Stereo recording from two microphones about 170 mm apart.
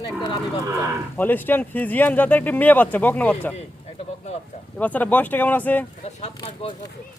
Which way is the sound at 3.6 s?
40° left (ahead or behind).